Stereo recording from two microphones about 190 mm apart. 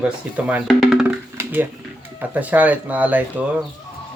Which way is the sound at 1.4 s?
10° right (ahead or behind).